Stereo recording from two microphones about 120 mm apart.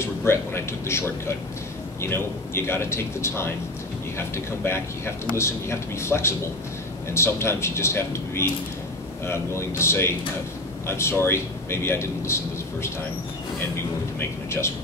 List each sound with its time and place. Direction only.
0.0 s a man's voice: 20° left (ahead or behind)